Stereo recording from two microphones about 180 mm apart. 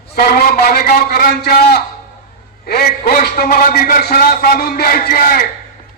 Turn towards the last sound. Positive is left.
turn(degrees=55)  # may be behind; listen again after turning